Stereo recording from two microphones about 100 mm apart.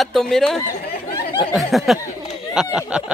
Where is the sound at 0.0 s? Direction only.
5° left (ahead or behind).